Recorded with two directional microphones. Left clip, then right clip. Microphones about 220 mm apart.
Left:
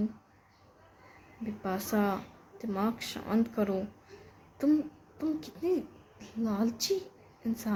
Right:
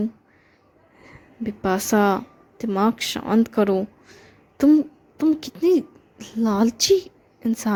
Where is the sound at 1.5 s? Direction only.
40° right (ahead or behind).